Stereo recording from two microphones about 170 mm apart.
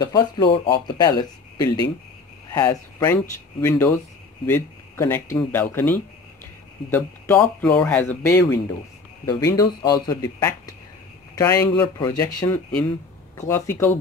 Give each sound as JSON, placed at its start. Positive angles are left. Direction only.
{"t": 0.0, "sound": "speech", "side_deg": 25}